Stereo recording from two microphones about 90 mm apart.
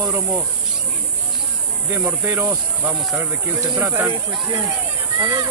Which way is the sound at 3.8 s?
30° right (ahead or behind).